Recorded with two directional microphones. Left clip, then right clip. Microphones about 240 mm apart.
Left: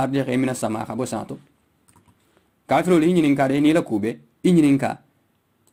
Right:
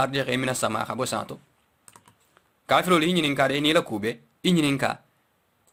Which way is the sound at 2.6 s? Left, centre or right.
Right.